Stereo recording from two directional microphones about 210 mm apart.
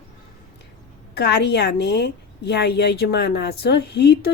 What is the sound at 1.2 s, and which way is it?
A woman's voice, 55° left (ahead or behind).